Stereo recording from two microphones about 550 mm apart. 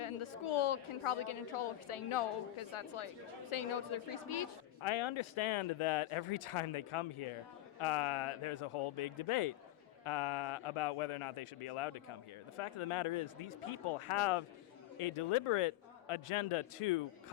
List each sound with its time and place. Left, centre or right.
0.0 s a woman's voice: left